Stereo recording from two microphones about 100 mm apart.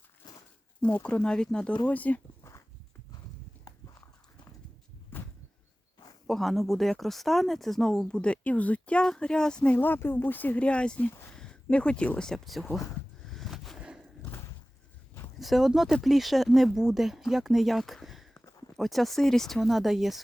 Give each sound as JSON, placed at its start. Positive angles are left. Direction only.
{"t": 0.2, "sound": "walk", "side_deg": 45}
{"t": 0.8, "sound": "speech", "side_deg": 15}
{"t": 2.4, "sound": "dog", "side_deg": 35}
{"t": 6.2, "sound": "speech", "side_deg": 0}
{"t": 13.3, "sound": "a sound", "side_deg": 0}
{"t": 14.2, "sound": "a sound", "side_deg": 25}
{"t": 15.4, "sound": "speech", "side_deg": 0}